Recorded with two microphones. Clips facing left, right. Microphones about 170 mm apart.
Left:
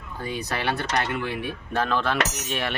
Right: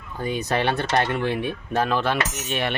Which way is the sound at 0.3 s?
25° right (ahead or behind).